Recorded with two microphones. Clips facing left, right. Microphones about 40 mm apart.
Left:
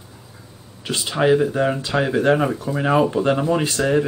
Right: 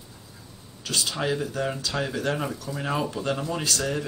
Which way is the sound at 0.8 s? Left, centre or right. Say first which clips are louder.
Left 9 dB; left.